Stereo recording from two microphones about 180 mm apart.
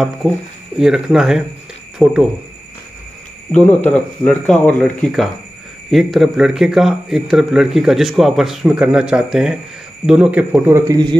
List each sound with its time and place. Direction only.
0.2 s a man's voice: centre (ahead or behind)
3.5 s a man's voice: 5° left (ahead or behind)
10.5 s a man's voice: 15° right (ahead or behind)